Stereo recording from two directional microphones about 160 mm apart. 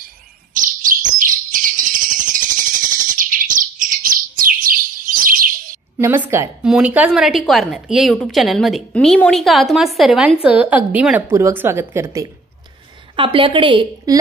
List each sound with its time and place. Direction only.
0.6 s bird: 55° right (ahead or behind)
5.9 s a woman's voice: 15° right (ahead or behind)
13.1 s a woman's voice: 35° right (ahead or behind)